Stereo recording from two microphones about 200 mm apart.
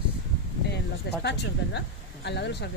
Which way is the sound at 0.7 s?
60° left (ahead or behind).